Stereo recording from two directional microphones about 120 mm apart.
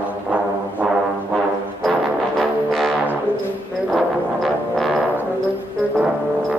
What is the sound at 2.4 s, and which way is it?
Music, centre (ahead or behind).